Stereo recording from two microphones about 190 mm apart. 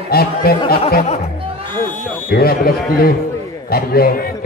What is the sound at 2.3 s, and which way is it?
Speech, 55° left (ahead or behind).